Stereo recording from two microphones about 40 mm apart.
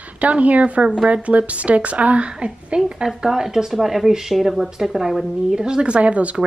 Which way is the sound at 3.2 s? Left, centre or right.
Centre.